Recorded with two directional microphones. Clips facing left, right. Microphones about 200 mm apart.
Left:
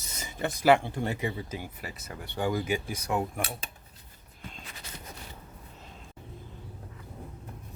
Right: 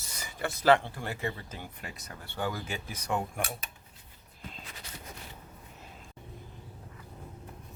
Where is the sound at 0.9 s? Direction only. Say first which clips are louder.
Left 4 dB; 20° left (ahead or behind); by 2.1 s 5° left (ahead or behind).